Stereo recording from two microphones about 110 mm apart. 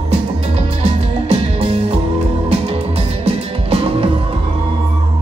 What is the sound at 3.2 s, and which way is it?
Music, 65° right (ahead or behind).